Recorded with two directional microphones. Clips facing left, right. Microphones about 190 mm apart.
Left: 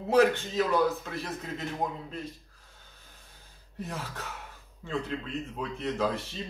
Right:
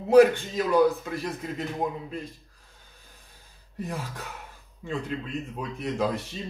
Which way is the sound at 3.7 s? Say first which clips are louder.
Right 4 dB; 15° right (ahead or behind).